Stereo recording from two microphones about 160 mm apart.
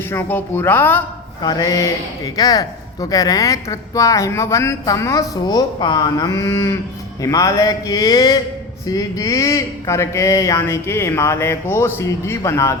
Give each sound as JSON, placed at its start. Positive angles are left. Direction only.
{"t": 0.1, "sound": "speech", "side_deg": 15}
{"t": 1.4, "sound": "speech", "side_deg": 25}